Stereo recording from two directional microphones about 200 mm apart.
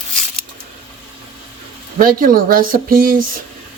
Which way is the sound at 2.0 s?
45° right (ahead or behind).